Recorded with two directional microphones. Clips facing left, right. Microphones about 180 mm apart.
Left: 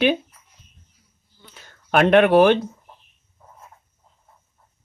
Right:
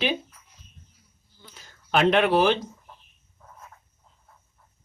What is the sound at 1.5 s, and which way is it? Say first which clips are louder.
Speech: left 4 dB; 55° left (ahead or behind).